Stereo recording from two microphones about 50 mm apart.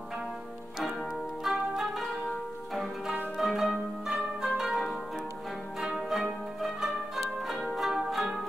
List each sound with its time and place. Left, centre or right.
1.4 s music: centre
3.3 s pizzicato: centre
5.8 s zither: centre
7.7 s music: centre